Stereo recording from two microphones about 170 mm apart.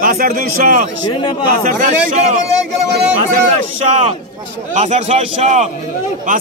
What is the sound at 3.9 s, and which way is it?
A man's voice, 45° right (ahead or behind).